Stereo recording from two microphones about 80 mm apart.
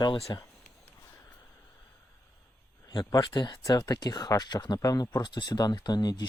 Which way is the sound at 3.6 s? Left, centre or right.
Left.